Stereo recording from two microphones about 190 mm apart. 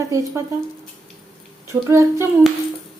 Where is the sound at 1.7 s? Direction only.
15° right (ahead or behind).